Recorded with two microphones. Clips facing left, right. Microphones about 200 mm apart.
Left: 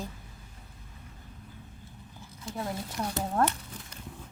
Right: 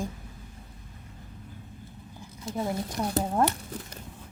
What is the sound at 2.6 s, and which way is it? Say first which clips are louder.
Speech: right 4 dB; 15° right (ahead or behind).